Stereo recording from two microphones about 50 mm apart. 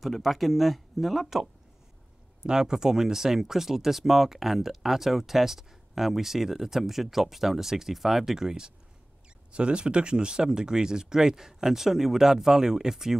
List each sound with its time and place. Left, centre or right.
0.0 s speech: centre